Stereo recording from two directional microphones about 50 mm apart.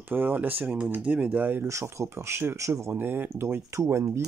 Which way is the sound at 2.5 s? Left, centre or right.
Right.